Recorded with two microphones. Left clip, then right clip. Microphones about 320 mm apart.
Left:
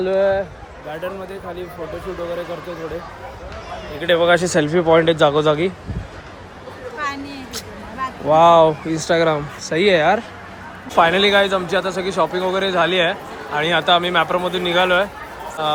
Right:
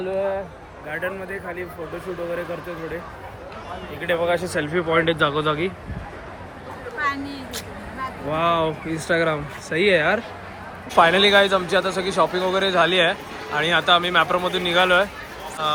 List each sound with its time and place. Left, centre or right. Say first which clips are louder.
0.0 s speech: left 7 dB; left
4.0 s a man's voice: left 7 dB; left; by 5.7 s centre
7.0 s a sound: right 1 dB; centre
8.3 s a man's voice: left 10 dB; centre